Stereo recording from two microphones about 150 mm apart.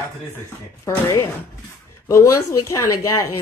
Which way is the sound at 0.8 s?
20° left (ahead or behind).